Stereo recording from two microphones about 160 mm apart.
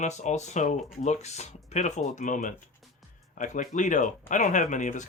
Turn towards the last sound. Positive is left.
turn(degrees=50)  # may be behind; listen again after turning